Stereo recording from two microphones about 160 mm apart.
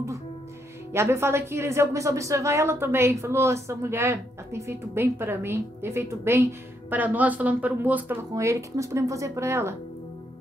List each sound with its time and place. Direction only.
0.9 s a woman's voice: 15° right (ahead or behind)